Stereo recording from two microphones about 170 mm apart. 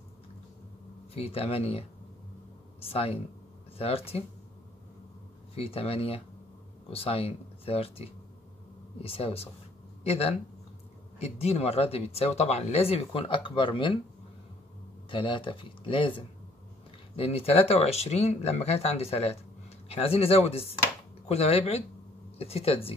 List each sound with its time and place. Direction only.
1.1 s speech: 35° left (ahead or behind)
5.5 s speech: 35° left (ahead or behind)
15.0 s speech: 30° left (ahead or behind)